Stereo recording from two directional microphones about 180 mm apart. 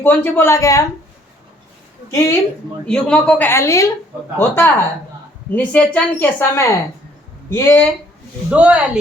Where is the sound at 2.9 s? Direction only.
5° left (ahead or behind).